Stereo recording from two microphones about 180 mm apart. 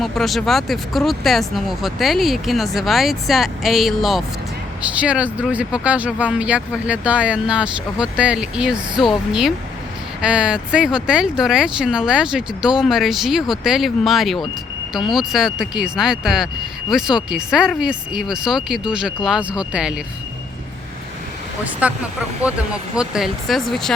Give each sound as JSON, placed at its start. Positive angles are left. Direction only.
{"t": 0.0, "sound": "speech", "side_deg": 0}
{"t": 21.6, "sound": "speech", "side_deg": -10}
{"t": 23.0, "sound": "speech", "side_deg": -5}